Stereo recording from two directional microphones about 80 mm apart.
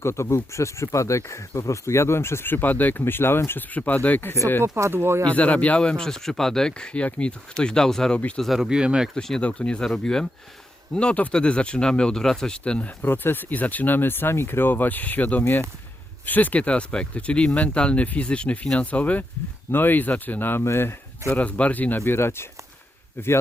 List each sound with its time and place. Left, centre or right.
0.0 s speech: left
4.6 s speech: right
5.3 s speech: centre
9.1 s speech: centre
13.0 s speech: left
21.4 s speech: centre